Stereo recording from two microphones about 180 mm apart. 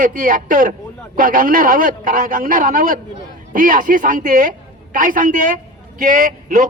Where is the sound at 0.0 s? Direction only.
50° right (ahead or behind).